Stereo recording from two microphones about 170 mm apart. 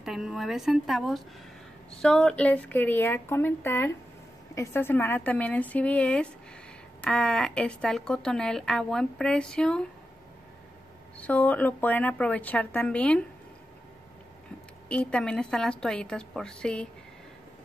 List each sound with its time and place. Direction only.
0.0 s a woman's voice: 5° right (ahead or behind)
11.1 s a woman's voice: 10° left (ahead or behind)
14.9 s a woman's voice: 5° left (ahead or behind)